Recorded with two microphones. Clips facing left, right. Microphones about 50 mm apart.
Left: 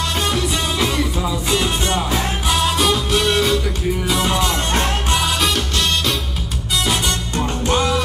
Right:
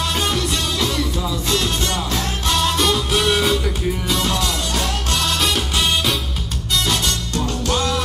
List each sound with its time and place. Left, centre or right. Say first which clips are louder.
0.2 s music: left 3 dB; centre
0.7 s music: left 2 dB; left
2.4 s music: even; centre
4.1 s music: left 2 dB; centre
4.4 s music: left 3 dB; left
5.4 s music: left 1 dB; centre
7.3 s music: left 3 dB; left